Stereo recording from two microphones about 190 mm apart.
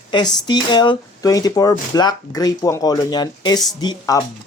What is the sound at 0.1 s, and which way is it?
Speech, 20° left (ahead or behind).